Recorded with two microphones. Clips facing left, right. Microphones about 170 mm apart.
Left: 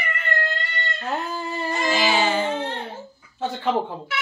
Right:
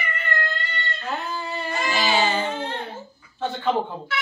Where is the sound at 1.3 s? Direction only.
40° left (ahead or behind).